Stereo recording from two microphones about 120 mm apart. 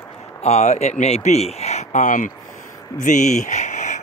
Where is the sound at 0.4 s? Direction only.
70° left (ahead or behind).